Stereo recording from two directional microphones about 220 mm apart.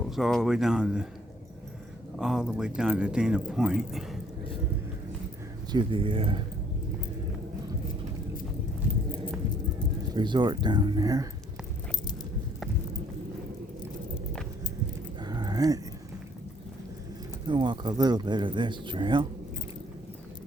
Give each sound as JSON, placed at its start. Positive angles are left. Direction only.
{"t": 0.0, "sound": "speech", "side_deg": 0}
{"t": 2.1, "sound": "speech", "side_deg": -5}
{"t": 5.7, "sound": "speech", "side_deg": -25}
{"t": 9.7, "sound": "speech", "side_deg": -20}
{"t": 15.2, "sound": "a sound", "side_deg": -20}
{"t": 17.4, "sound": "speech", "side_deg": -20}